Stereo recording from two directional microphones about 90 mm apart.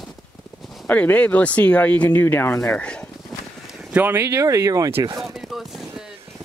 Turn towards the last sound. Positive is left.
turn(degrees=-5)  # may be behind; listen again after turning